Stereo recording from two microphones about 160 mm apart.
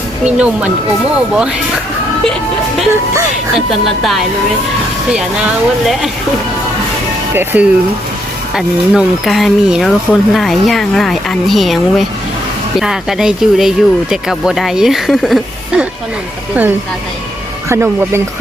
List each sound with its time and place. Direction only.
0.3 s speech: 10° right (ahead or behind)
7.3 s speech: 10° right (ahead or behind)
17.7 s speech: 15° right (ahead or behind)